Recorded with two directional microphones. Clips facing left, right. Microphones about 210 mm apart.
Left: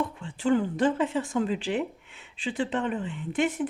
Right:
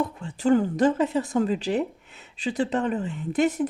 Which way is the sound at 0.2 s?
40° right (ahead or behind).